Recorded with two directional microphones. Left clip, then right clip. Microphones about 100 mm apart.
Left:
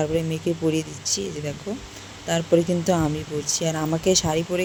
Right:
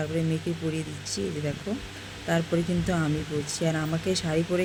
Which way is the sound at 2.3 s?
30° left (ahead or behind).